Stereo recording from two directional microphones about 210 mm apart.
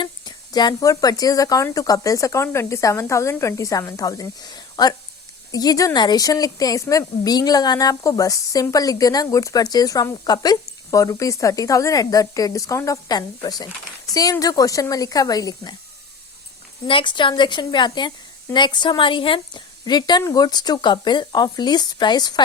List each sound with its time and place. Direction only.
0.0 s speech: 20° left (ahead or behind)
16.8 s a woman's voice: 25° left (ahead or behind)